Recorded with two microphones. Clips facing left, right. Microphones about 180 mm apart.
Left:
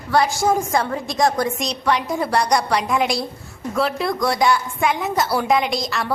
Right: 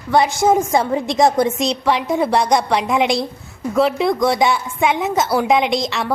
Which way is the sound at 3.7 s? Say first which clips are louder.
Right 5 dB; 20° right (ahead or behind).